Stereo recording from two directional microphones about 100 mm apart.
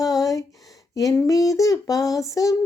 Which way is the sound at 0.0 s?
35° left (ahead or behind).